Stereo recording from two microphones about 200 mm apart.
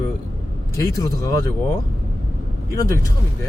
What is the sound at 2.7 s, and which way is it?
Speech, 15° left (ahead or behind).